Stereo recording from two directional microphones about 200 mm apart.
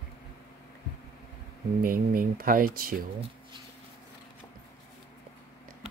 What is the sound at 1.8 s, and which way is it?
Speech, 45° right (ahead or behind).